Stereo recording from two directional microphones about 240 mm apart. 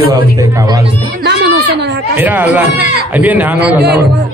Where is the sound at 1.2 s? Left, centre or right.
Right.